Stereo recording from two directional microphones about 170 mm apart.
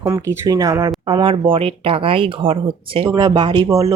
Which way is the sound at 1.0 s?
30° right (ahead or behind).